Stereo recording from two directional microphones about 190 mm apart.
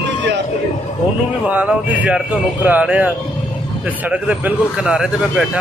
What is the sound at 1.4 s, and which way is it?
Speech, 10° right (ahead or behind).